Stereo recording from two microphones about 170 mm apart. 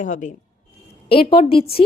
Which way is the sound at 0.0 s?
45° left (ahead or behind).